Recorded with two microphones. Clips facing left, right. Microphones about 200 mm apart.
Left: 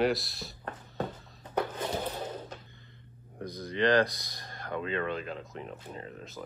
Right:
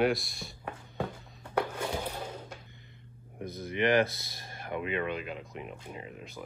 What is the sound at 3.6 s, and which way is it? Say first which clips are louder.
Speech: left 1 dB; 15° right (ahead or behind).